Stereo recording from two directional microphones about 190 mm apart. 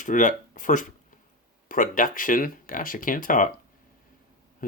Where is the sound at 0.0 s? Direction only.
40° left (ahead or behind).